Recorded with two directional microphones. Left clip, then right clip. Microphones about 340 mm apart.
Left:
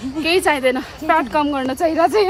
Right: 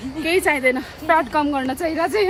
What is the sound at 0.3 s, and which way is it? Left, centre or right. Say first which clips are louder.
Speech: left 2 dB; centre.